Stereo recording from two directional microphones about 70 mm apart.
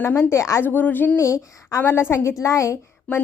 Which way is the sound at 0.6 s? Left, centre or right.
Left.